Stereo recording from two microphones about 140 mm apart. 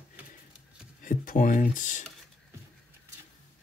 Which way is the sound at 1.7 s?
65° left (ahead or behind).